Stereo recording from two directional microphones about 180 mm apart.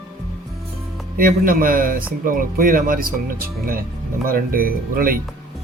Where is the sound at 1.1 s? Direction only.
50° right (ahead or behind).